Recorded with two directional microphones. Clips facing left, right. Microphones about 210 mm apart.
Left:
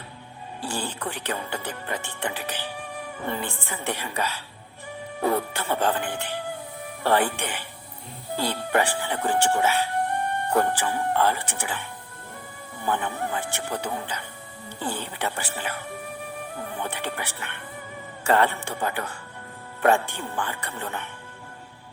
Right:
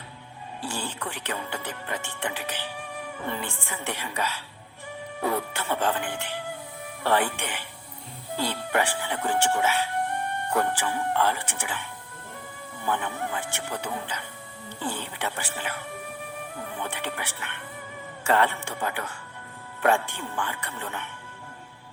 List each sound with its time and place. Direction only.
0.7 s speech: 35° left (ahead or behind)